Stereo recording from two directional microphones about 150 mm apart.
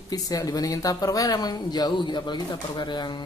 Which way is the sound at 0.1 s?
25° left (ahead or behind).